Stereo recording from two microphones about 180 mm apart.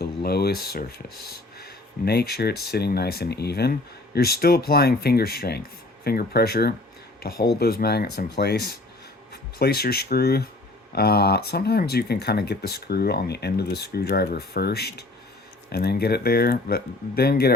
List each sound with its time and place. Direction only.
0.0 s speech: 60° left (ahead or behind)